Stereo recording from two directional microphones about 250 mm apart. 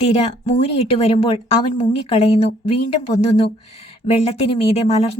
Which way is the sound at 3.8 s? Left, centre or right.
Left.